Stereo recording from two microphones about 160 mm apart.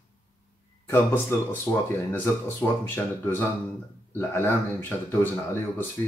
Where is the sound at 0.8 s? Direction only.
10° left (ahead or behind).